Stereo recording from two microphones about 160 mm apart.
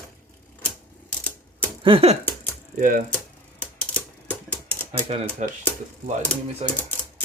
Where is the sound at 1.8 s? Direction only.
35° right (ahead or behind).